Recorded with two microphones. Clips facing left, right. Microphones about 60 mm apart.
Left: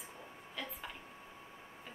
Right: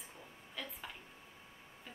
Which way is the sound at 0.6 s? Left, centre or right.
Centre.